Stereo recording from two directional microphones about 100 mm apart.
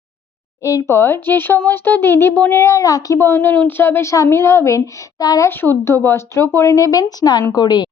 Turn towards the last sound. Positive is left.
turn(degrees=45)  # may be behind; listen again after turning